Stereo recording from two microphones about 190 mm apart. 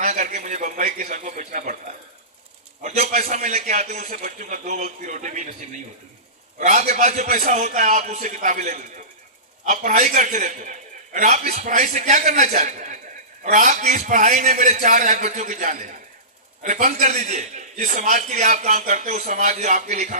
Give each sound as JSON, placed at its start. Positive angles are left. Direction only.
{"t": 0.0, "sound": "a sound", "side_deg": -45}
{"t": 2.8, "sound": "a man's voice", "side_deg": -35}
{"t": 6.6, "sound": "a man's voice", "side_deg": -40}